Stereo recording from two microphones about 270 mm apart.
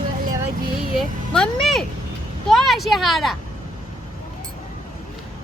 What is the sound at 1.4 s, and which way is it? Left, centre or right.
Speech, centre.